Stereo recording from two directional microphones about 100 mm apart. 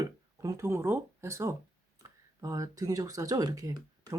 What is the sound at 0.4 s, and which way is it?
Speech, 30° right (ahead or behind).